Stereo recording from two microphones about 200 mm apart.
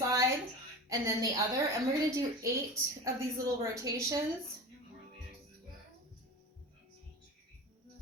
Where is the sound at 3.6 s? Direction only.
15° right (ahead or behind).